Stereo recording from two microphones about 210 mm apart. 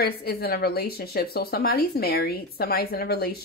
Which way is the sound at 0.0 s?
45° left (ahead or behind).